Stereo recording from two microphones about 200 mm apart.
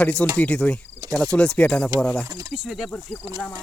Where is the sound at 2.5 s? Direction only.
Centre (ahead or behind).